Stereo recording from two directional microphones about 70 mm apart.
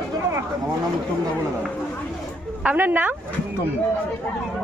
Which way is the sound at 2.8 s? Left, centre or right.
Right.